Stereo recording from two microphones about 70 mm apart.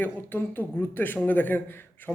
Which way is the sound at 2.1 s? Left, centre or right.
Centre.